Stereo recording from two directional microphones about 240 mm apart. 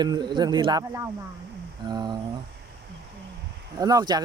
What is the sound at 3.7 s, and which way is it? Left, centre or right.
Speech, centre.